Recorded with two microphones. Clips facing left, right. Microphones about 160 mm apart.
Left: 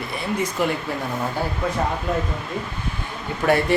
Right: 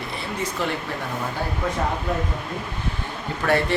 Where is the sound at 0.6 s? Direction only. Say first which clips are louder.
Left 4 dB; 15° left (ahead or behind).